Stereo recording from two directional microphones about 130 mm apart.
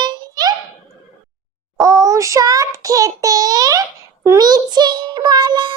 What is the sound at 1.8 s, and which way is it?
Child singing, 25° right (ahead or behind).